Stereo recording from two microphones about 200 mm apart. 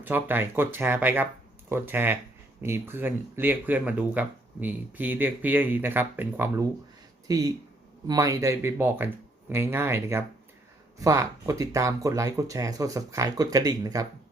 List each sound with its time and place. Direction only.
0.0 s speech: 10° right (ahead or behind)